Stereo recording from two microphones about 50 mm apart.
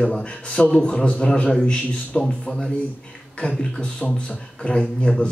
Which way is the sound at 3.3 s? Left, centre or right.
Centre.